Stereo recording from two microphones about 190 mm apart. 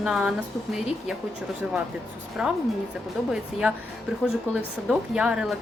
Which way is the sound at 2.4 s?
5° right (ahead or behind).